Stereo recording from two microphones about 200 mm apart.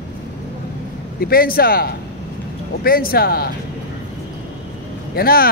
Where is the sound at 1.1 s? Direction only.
50° left (ahead or behind).